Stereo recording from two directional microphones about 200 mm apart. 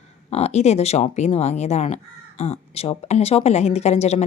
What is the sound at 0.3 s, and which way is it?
Speech, 30° left (ahead or behind).